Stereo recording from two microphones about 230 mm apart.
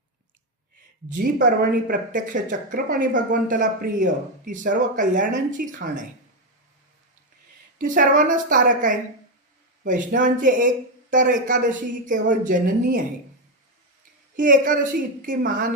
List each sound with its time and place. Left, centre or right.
1.1 s speech: right
7.8 s speech: right
14.3 s speech: right